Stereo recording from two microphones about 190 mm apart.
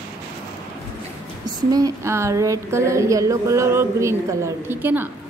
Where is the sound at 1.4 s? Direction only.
20° right (ahead or behind).